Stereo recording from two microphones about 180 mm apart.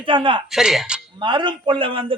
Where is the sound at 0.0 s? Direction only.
30° right (ahead or behind).